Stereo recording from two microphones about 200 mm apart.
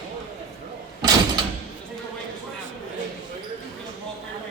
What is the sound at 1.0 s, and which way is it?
Door, 20° right (ahead or behind).